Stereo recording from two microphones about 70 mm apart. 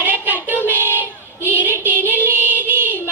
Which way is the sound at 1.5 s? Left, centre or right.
Right.